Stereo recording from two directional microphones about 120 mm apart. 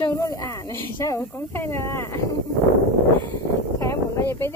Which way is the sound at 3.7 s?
25° left (ahead or behind).